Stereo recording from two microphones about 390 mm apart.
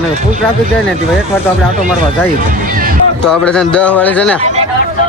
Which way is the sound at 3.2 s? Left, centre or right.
Centre.